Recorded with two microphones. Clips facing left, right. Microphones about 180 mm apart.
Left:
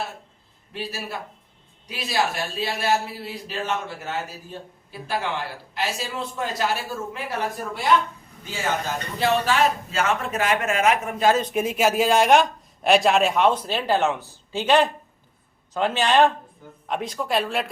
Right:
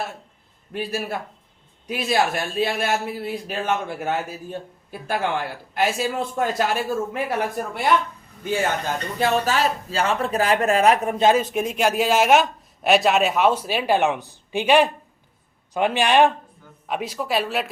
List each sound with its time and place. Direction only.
0.7 s a man's voice: 50° right (ahead or behind)
9.1 s a man's voice: 50° right (ahead or behind)
9.9 s a man's voice: 35° right (ahead or behind)
11.3 s a man's voice: centre (ahead or behind)